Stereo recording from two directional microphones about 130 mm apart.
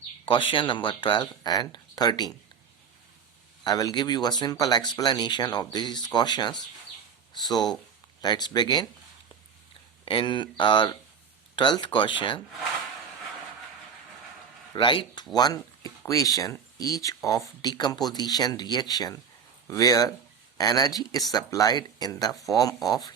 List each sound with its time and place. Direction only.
0.3 s speech: 40° left (ahead or behind)
3.6 s speech: 30° left (ahead or behind)
10.1 s speech: 40° left (ahead or behind)
14.7 s speech: 40° left (ahead or behind)